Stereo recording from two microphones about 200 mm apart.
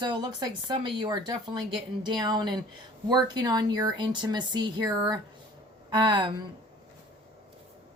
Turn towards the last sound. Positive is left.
turn(degrees=-25)  # may be behind; listen again after turning